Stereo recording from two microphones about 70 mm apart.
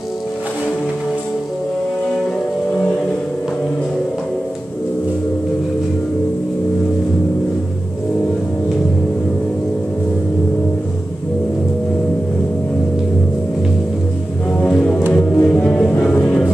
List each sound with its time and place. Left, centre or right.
14.6 s music: centre